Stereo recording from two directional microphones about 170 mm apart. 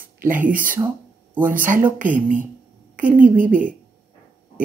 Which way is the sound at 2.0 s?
50° right (ahead or behind).